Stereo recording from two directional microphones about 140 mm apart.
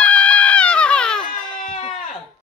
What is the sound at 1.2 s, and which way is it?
Baby cry, 70° left (ahead or behind).